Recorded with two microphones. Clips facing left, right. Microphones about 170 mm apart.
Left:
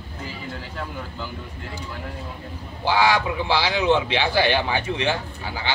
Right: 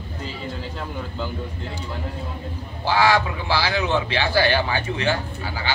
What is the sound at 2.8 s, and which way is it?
A man's voice, 15° left (ahead or behind).